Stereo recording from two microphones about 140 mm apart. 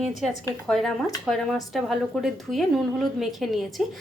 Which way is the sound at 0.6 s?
Centre (ahead or behind).